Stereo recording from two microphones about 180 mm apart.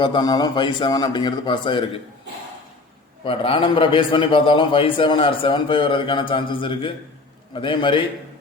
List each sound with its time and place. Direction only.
0.0 s a man's voice: 25° left (ahead or behind)
3.2 s a man's voice: 30° left (ahead or behind)